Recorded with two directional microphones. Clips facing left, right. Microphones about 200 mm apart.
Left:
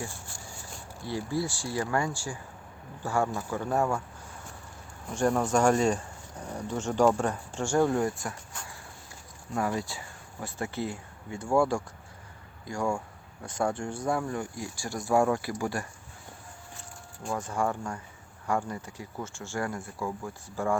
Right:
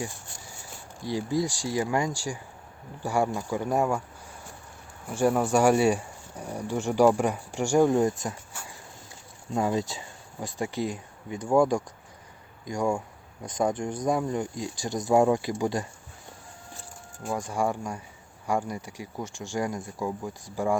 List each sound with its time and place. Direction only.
1.0 s speech: 15° right (ahead or behind)
5.0 s speech: 5° right (ahead or behind)
9.6 s speech: 20° right (ahead or behind)
17.3 s speech: 15° right (ahead or behind)